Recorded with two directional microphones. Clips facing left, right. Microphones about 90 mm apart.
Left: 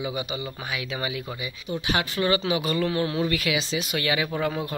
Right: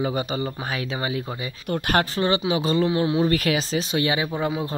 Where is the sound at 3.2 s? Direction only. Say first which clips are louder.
Right 4 dB; 40° right (ahead or behind).